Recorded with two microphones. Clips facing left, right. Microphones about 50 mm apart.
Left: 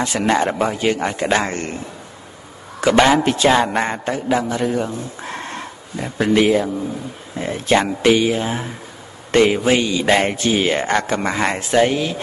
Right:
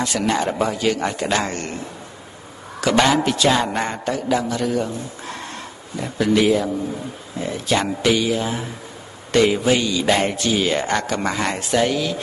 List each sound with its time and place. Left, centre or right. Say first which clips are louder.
0.0 s speech: left 3 dB; left
2.8 s a man's voice: left 3 dB; left